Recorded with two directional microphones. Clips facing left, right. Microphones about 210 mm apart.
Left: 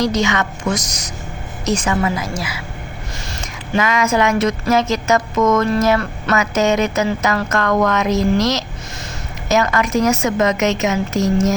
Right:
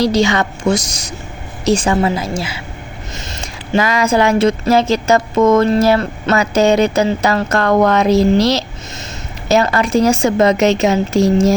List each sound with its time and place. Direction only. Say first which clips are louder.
0.0 s a woman's voice: right 4 dB; 30° right (ahead or behind)